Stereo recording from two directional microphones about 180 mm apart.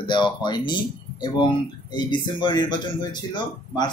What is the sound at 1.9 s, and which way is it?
Speech, 25° left (ahead or behind).